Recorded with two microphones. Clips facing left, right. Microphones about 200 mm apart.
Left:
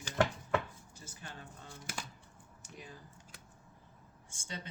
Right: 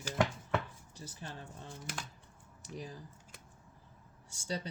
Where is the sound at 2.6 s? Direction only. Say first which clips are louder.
Right 7 dB; 35° right (ahead or behind).